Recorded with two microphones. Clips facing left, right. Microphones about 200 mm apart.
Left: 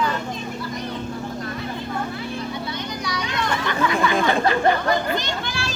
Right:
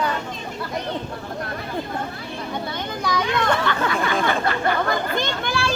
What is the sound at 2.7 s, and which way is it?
Children playing, 55° right (ahead or behind).